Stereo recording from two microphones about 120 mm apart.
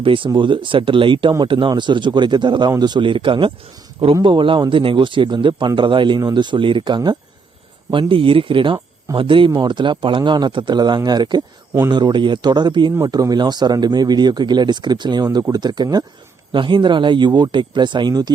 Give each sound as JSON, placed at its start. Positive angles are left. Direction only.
{"t": 0.0, "sound": "a man's voice", "side_deg": -45}